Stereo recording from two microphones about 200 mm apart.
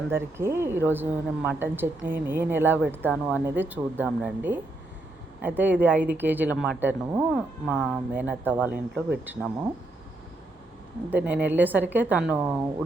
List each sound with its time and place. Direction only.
0.1 s speech: 10° right (ahead or behind)
7.3 s speech: centre (ahead or behind)
11.1 s speech: 5° right (ahead or behind)